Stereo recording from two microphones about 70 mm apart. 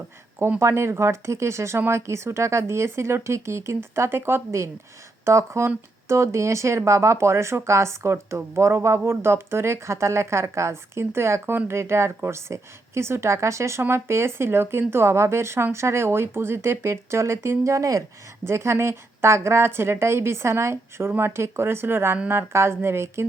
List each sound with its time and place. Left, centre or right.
0.6 s speech: right
5.2 s speech: right
18.4 s speech: right